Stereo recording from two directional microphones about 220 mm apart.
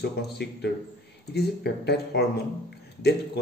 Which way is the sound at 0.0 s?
50° left (ahead or behind).